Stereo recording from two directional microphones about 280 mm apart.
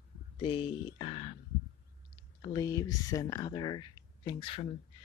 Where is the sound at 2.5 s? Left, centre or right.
Centre.